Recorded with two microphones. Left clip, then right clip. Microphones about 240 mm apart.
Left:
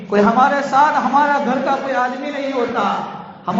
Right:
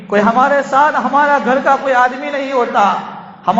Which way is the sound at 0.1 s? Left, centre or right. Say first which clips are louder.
Right 2 dB; right.